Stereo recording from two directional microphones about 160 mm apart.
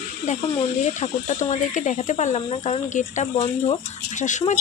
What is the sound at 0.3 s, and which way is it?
Speech, 45° left (ahead or behind).